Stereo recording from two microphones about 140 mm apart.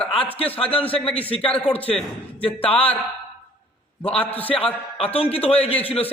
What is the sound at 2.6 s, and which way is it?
Speech, 40° left (ahead or behind).